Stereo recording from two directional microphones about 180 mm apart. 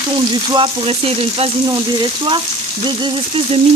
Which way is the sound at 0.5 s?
30° right (ahead or behind).